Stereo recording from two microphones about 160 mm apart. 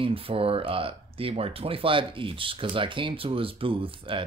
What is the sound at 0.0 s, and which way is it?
Speech, 35° right (ahead or behind).